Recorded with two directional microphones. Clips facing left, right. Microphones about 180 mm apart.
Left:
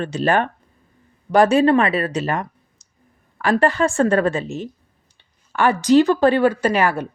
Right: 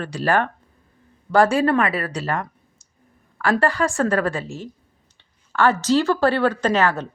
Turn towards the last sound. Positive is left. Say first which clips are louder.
# left 1 dB
turn(degrees=10)  # may be behind; listen again after turning